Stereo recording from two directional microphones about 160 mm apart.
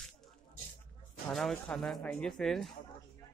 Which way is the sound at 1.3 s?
Centre (ahead or behind).